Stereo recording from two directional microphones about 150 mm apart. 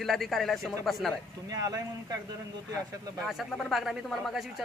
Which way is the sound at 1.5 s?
25° right (ahead or behind).